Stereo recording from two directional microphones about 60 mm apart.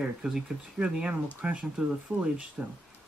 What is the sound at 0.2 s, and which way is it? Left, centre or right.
Speech, centre.